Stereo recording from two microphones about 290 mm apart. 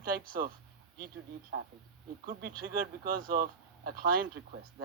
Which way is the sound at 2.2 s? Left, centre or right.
Right.